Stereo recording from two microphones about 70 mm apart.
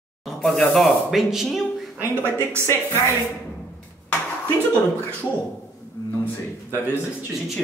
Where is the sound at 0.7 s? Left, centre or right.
Centre.